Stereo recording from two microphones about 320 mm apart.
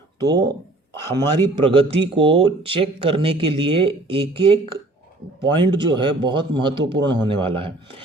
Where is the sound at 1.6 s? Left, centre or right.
Centre.